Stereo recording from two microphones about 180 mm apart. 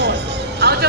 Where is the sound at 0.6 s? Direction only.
65° right (ahead or behind).